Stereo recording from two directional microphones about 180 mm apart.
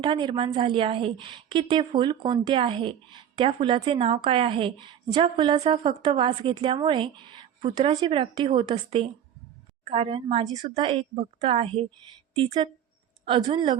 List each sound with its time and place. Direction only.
0.0 s a woman's voice: 25° right (ahead or behind)
13.2 s a woman's voice: 30° right (ahead or behind)